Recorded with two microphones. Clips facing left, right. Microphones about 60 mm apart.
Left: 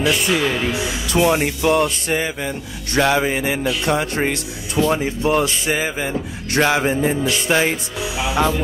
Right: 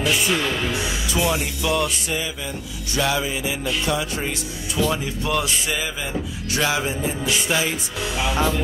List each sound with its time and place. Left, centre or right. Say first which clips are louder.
0.4 s speech: left 4 dB; centre
1.0 s speech: left 8 dB; left
8.0 s speech: even; centre